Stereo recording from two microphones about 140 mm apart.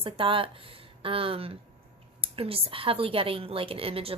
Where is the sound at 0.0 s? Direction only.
40° right (ahead or behind).